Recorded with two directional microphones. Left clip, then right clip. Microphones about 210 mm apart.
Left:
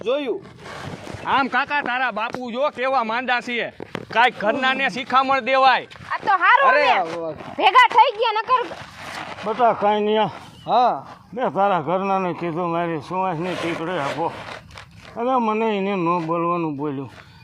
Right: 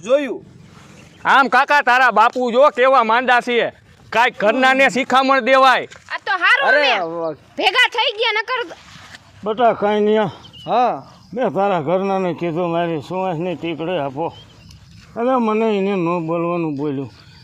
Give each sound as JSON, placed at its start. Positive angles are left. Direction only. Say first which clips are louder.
{"t": 0.1, "sound": "speech", "louder": "right 6 dB", "side_deg": -45}
{"t": 1.2, "sound": "speech", "louder": "right 7 dB", "side_deg": -60}
{"t": 6.1, "sound": "a sound", "louder": "left 3 dB", "side_deg": -15}
{"t": 6.4, "sound": "speech", "louder": "right 2 dB", "side_deg": -30}
{"t": 9.5, "sound": "speech", "louder": "right 2 dB", "side_deg": -35}
{"t": 10.7, "sound": "speech", "louder": "right 1 dB", "side_deg": -25}
{"t": 11.3, "sound": "speech", "louder": "right 2 dB", "side_deg": -35}
{"t": 15.1, "sound": "speech", "louder": "right 3 dB", "side_deg": -35}